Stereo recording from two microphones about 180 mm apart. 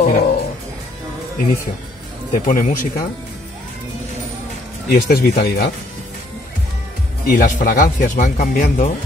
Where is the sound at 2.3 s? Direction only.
50° left (ahead or behind).